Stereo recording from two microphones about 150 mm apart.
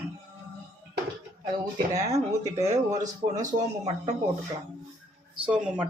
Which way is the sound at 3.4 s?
50° right (ahead or behind).